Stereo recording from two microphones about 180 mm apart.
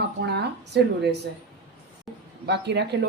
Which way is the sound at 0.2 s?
75° right (ahead or behind).